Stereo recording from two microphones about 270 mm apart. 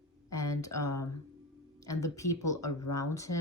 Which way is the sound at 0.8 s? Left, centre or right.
Centre.